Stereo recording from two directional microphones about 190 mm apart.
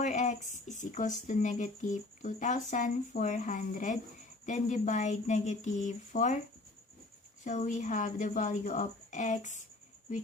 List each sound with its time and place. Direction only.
0.0 s speech: 40° left (ahead or behind)
7.4 s speech: 40° left (ahead or behind)